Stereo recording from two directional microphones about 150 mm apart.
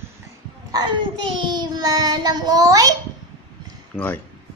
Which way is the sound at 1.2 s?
30° right (ahead or behind).